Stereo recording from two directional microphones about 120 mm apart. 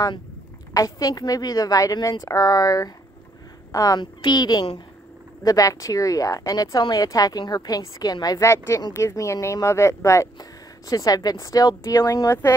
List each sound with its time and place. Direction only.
0.7 s speech: 30° left (ahead or behind)